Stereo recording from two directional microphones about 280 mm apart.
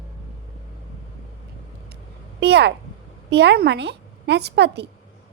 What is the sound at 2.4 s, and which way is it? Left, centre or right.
A woman's voice, right.